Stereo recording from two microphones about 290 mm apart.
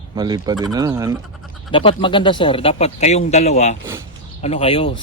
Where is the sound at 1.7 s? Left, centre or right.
Centre.